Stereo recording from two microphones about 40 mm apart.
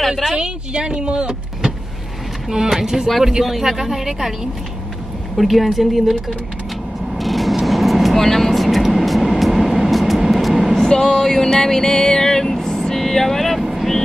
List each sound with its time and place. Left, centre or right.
0.1 s a sound: centre
0.4 s speech: right
2.5 s speech: centre
5.4 s a woman's voice: centre
7.2 s vehicle: centre
10.8 s a sound: centre
13.6 s vehicle: centre